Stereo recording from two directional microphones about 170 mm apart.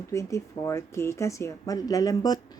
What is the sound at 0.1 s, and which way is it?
Speech, 15° left (ahead or behind).